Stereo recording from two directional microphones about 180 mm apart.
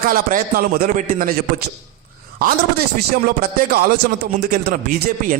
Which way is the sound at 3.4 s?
55° right (ahead or behind).